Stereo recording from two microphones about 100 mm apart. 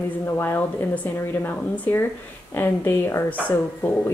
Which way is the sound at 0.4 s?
20° left (ahead or behind).